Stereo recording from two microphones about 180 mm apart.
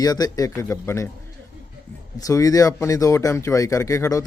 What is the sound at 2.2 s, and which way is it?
Speech, 20° left (ahead or behind).